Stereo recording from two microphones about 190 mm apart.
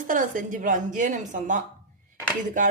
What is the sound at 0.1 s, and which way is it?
A woman's voice, 45° right (ahead or behind).